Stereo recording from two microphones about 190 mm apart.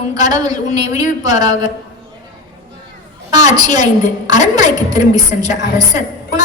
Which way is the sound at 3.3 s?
20° right (ahead or behind).